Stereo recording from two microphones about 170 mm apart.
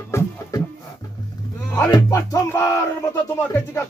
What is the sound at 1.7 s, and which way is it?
Music, 20° left (ahead or behind).